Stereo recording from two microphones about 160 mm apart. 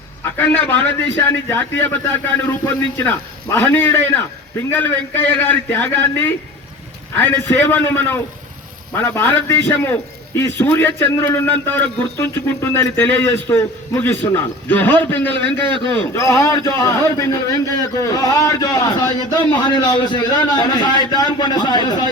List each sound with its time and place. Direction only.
0.3 s a man's voice: 10° left (ahead or behind)
3.0 s a man's voice: 10° left (ahead or behind)